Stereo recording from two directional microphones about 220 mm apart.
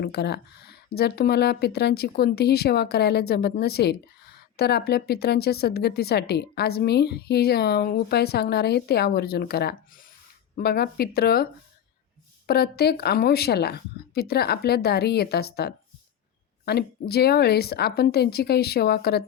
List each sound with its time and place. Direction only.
0.0 s speech: 50° left (ahead or behind)
12.5 s speech: 45° left (ahead or behind)